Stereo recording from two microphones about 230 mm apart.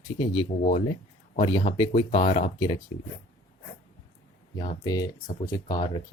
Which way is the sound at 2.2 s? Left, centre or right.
Left.